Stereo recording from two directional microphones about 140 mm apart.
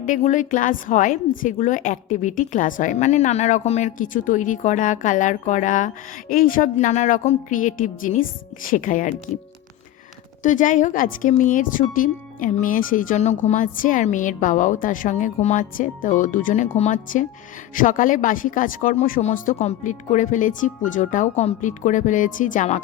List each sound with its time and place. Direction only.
0.1 s a woman's voice: 60° left (ahead or behind)
10.4 s speech: 65° left (ahead or behind)
16.7 s a woman's voice: 60° left (ahead or behind); by 19.2 s 75° left (ahead or behind)
19.2 s a woman's voice: 60° left (ahead or behind)